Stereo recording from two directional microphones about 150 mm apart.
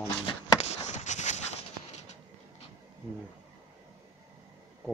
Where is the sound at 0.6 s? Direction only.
50° left (ahead or behind).